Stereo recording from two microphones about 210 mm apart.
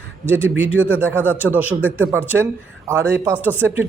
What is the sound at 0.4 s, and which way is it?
A man's voice, 10° right (ahead or behind).